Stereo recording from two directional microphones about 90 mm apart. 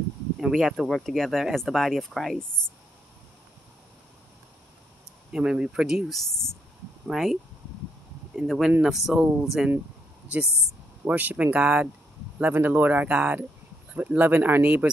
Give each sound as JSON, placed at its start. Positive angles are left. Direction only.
{"t": 0.4, "sound": "speech", "side_deg": -5}
{"t": 5.3, "sound": "speech", "side_deg": -10}
{"t": 8.4, "sound": "speech", "side_deg": -5}
{"t": 11.1, "sound": "speech", "side_deg": -15}